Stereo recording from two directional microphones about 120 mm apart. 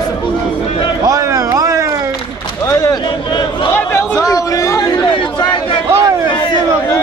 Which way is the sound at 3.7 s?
20° left (ahead or behind).